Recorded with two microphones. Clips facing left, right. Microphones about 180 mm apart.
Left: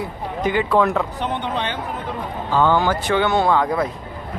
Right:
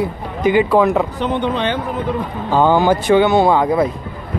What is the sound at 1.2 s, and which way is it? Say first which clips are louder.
Speech: right 6 dB; 90° right.